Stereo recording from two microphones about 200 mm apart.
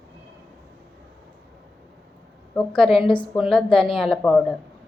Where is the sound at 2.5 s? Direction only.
5° left (ahead or behind).